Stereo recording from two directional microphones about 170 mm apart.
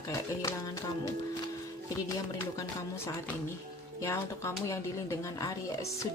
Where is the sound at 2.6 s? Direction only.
15° left (ahead or behind).